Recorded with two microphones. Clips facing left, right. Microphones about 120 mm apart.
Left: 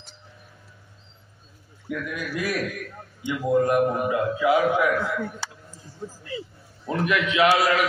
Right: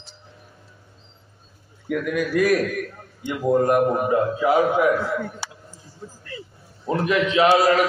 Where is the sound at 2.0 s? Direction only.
55° right (ahead or behind).